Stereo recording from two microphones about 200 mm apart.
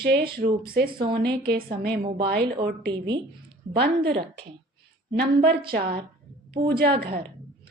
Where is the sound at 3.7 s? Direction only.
55° right (ahead or behind).